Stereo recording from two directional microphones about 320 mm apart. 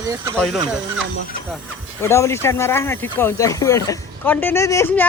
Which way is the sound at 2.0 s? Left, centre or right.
Centre.